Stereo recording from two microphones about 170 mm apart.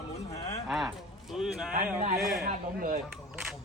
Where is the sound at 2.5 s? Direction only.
50° right (ahead or behind).